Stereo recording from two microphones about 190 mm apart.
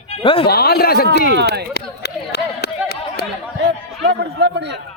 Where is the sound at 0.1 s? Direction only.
30° left (ahead or behind).